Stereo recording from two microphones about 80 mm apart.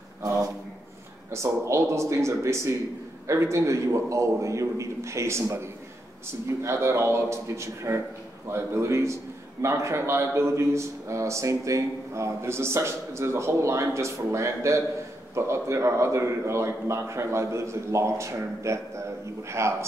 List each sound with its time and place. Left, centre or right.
1.3 s a man's voice: right